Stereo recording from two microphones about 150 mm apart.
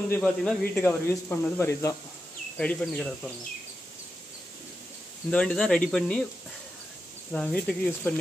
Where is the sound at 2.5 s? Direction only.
5° left (ahead or behind).